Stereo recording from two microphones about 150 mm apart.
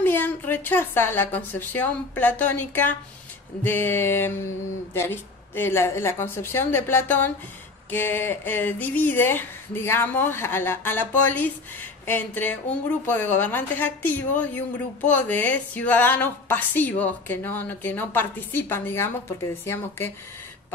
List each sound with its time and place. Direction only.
0.0 s a woman's voice: 10° left (ahead or behind)